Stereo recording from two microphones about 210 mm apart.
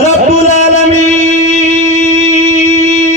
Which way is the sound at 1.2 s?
30° left (ahead or behind).